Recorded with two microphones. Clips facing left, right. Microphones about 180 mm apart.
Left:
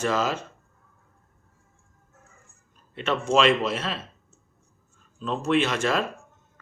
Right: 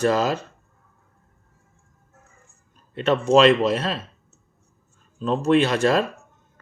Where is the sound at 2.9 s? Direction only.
35° right (ahead or behind).